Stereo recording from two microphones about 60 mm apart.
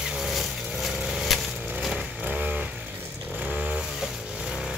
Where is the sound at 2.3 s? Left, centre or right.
Centre.